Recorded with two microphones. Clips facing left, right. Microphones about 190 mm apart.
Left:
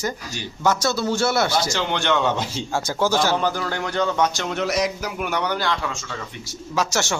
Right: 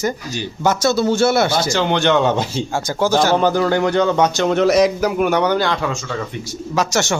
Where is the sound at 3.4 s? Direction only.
60° right (ahead or behind).